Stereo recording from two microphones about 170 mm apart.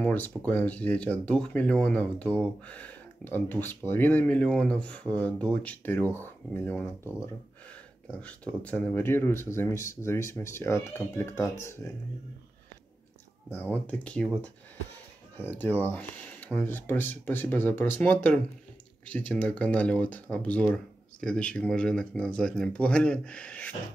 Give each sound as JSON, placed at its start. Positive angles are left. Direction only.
{"t": 0.4, "sound": "speech", "side_deg": 10}
{"t": 8.1, "sound": "speech", "side_deg": 5}
{"t": 13.5, "sound": "speech", "side_deg": 10}